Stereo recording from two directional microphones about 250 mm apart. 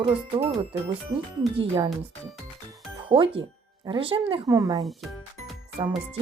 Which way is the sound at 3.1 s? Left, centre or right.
Right.